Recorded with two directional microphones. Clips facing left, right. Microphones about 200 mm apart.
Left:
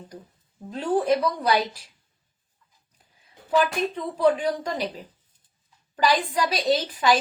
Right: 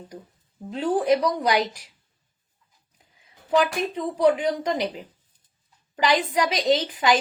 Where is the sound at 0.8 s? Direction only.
15° right (ahead or behind).